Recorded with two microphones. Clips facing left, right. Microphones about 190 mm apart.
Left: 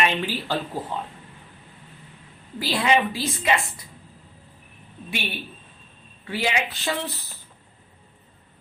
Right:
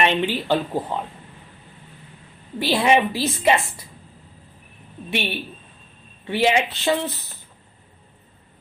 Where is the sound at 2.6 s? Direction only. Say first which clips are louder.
Right 4 dB; 25° right (ahead or behind).